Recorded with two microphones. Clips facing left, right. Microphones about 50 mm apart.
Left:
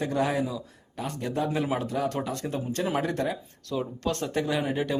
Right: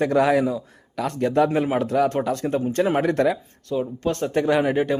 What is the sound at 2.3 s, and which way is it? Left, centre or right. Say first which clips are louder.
Speech: right 8 dB; right.